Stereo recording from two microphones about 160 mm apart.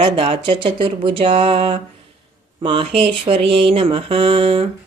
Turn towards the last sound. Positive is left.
turn(degrees=-35)  # may be behind; listen again after turning